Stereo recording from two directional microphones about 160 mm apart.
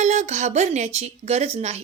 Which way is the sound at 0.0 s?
45° right (ahead or behind).